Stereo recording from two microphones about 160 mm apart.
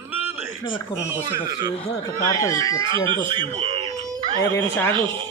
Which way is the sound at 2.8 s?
30° right (ahead or behind).